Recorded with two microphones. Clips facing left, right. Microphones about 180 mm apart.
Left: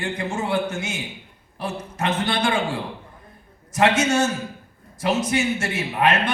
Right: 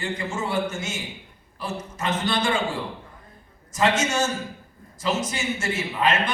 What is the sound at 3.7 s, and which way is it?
A man's voice, 65° left (ahead or behind).